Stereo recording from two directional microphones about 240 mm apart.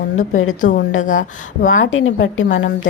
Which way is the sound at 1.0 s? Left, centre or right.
Left.